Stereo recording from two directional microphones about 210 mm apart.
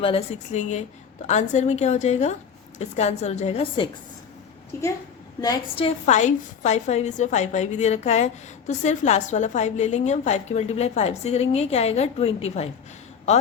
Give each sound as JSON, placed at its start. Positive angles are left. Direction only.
{"t": 0.0, "sound": "a woman's voice", "side_deg": 30}
{"t": 4.7, "sound": "a woman's voice", "side_deg": 15}